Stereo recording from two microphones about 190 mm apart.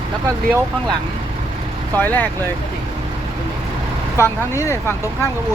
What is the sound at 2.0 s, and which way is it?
Speech, 10° left (ahead or behind).